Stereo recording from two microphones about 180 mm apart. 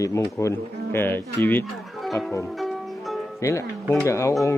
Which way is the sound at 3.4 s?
15° left (ahead or behind).